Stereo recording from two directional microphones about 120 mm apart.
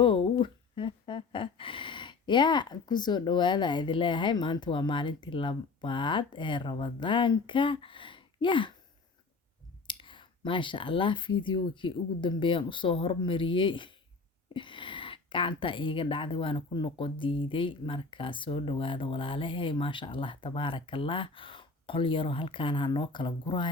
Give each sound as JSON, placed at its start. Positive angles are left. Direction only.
{"t": 0.0, "sound": "speech", "side_deg": 40}
{"t": 9.8, "sound": "a woman's voice", "side_deg": 45}